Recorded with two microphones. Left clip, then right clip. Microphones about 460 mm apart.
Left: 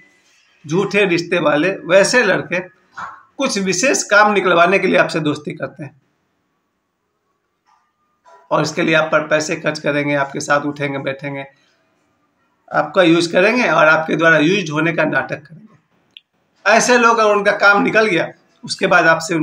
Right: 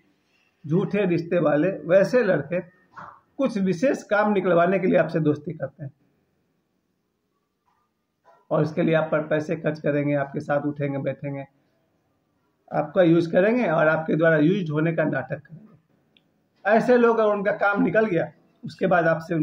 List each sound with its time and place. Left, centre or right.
0.7 s speech: right
8.5 s speech: right
12.6 s speech: right
16.6 s speech: right